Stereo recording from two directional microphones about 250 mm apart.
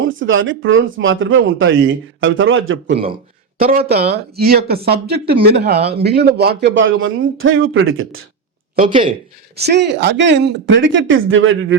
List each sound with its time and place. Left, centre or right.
0.2 s speech: right
3.6 s speech: right
8.9 s speech: centre
9.6 s speech: right